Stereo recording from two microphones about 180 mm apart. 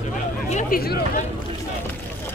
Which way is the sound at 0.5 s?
50° left (ahead or behind).